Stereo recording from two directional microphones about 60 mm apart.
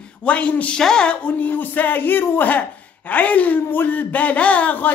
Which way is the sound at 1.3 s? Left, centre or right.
Left.